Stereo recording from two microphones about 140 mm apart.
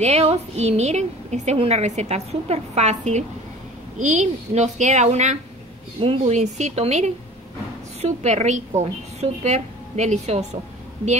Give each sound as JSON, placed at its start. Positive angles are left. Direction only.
{"t": 0.0, "sound": "a woman's voice", "side_deg": -50}